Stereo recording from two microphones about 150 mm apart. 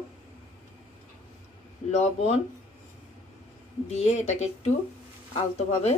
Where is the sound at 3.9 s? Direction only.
50° left (ahead or behind).